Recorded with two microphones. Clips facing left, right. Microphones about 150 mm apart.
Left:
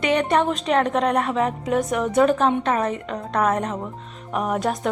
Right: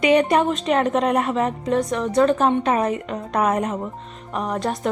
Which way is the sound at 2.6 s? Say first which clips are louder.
Right 2 dB; 10° right (ahead or behind).